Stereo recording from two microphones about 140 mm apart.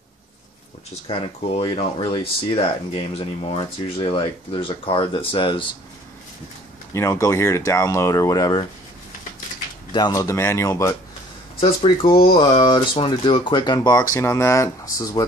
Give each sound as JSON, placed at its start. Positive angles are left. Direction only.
{"t": 1.1, "sound": "speech", "side_deg": 50}
{"t": 1.6, "sound": "speech", "side_deg": 35}
{"t": 6.9, "sound": "speech", "side_deg": 20}
{"t": 9.9, "sound": "speech", "side_deg": 30}
{"t": 11.6, "sound": "speech", "side_deg": 40}